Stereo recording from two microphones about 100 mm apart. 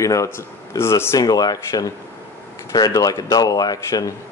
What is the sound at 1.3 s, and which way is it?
Speech, 40° left (ahead or behind).